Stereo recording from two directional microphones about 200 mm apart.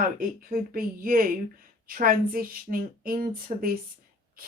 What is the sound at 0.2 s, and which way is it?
Speech, 45° right (ahead or behind).